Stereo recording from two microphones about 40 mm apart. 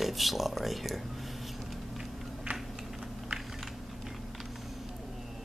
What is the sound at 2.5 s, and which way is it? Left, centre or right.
Typing, right.